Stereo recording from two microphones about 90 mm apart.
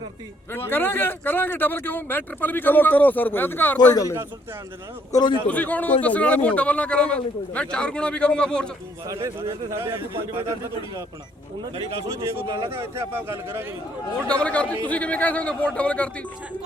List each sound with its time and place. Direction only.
0.5 s speech: 25° left (ahead or behind)
5.1 s a man's voice: 55° left (ahead or behind)
5.5 s a man's voice: 15° left (ahead or behind)
9.0 s a man's voice: 35° right (ahead or behind)
12.5 s speech: 35° right (ahead or behind)
14.3 s a man's voice: 15° left (ahead or behind)